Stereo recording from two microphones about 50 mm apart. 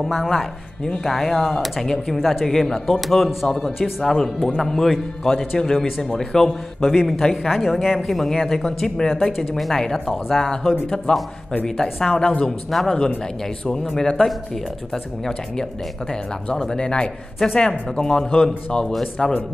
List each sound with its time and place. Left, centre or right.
0.1 s speech: centre
1.8 s speech: centre
3.4 s speech: centre
12.4 s speech: centre